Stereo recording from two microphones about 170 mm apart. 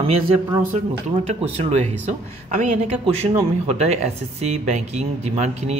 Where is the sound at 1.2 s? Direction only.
40° right (ahead or behind).